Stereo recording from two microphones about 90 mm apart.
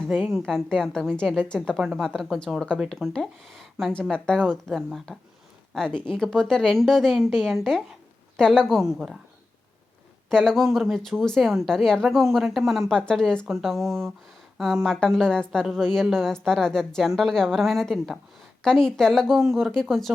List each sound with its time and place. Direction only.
0.0 s a woman's voice: 25° right (ahead or behind)
0.4 s a woman's voice: 5° left (ahead or behind)
10.2 s a woman's voice: 5° left (ahead or behind)